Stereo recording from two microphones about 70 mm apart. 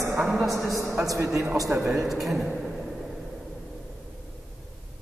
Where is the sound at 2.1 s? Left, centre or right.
Centre.